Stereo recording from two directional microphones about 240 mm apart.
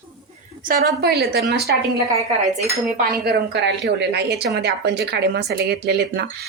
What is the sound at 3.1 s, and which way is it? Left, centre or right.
A woman's voice, right.